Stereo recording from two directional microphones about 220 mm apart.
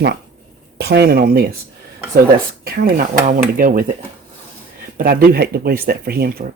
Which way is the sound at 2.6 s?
40° right (ahead or behind).